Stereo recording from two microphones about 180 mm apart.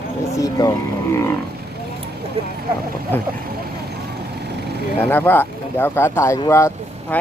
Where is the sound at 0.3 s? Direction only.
20° left (ahead or behind).